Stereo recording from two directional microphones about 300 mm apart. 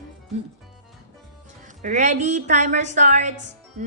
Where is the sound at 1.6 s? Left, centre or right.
Right.